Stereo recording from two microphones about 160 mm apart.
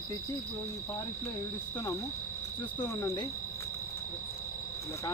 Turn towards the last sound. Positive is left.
turn(degrees=25)  # may be behind; listen again after turning